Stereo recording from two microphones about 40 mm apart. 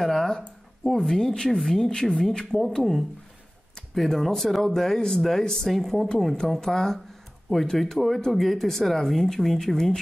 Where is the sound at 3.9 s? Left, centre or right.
Centre.